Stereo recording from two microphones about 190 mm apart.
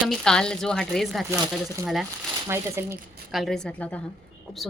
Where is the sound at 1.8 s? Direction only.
15° right (ahead or behind).